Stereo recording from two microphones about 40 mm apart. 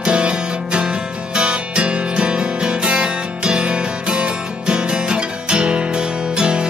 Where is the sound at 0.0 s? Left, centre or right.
Right.